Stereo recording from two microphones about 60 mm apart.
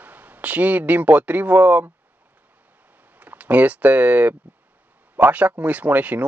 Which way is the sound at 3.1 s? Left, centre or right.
Right.